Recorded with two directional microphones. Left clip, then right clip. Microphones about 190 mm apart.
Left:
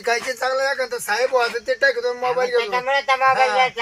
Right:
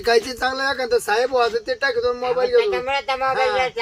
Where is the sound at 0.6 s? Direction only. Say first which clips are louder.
Right 2 dB; 35° right (ahead or behind).